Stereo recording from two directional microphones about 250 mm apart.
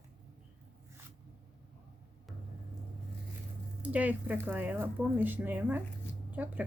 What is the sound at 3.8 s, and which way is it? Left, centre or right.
Speech, centre.